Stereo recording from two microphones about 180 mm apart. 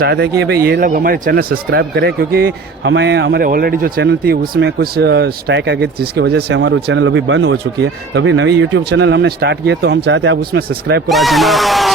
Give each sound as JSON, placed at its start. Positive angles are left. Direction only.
{"t": 0.0, "sound": "speech", "side_deg": -65}
{"t": 3.4, "sound": "speech", "side_deg": -55}
{"t": 11.1, "sound": "speech", "side_deg": 0}